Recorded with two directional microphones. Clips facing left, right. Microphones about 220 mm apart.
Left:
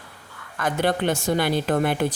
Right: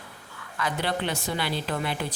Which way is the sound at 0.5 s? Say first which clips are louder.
Left 6 dB; 50° left (ahead or behind).